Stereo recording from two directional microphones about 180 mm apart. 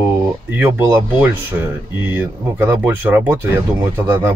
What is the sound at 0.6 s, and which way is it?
Speech, 15° right (ahead or behind).